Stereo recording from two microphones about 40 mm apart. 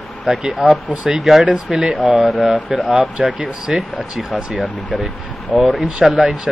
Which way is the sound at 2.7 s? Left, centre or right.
Centre.